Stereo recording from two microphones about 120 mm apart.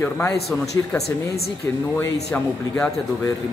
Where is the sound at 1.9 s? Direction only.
10° left (ahead or behind).